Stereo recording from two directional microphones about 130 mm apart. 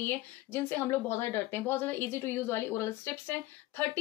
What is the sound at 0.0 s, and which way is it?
Speech, 15° left (ahead or behind).